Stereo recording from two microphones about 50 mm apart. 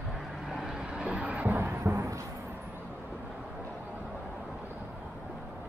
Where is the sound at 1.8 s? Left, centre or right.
Right.